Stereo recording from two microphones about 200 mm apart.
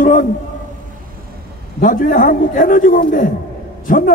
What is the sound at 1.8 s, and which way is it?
A man's voice, 45° left (ahead or behind).